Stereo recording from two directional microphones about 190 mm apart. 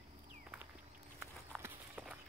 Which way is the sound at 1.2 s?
10° right (ahead or behind).